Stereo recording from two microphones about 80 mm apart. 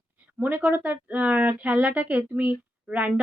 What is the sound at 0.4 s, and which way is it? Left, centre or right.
A woman's voice, right.